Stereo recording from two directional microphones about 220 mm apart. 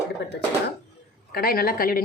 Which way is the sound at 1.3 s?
45° left (ahead or behind).